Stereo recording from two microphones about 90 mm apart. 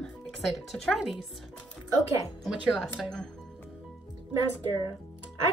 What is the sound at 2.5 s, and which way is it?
Speech, 5° right (ahead or behind).